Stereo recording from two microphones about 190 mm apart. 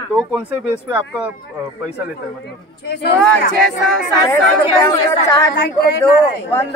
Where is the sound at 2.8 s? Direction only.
60° left (ahead or behind).